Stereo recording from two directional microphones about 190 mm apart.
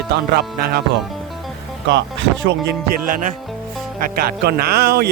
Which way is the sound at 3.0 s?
45° right (ahead or behind).